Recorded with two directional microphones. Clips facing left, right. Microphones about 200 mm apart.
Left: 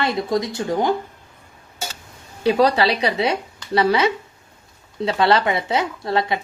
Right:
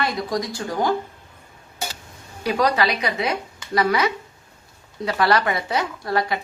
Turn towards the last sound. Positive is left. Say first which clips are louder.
# left 2 dB
turn(degrees=25)  # may be behind; listen again after turning